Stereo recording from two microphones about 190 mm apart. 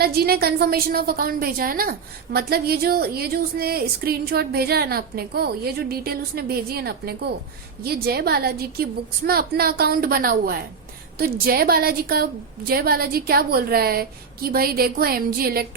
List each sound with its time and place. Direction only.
0.0 s a woman's voice: 55° right (ahead or behind)